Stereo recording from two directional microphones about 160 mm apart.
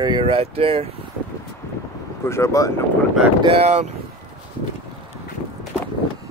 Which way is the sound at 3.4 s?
35° right (ahead or behind).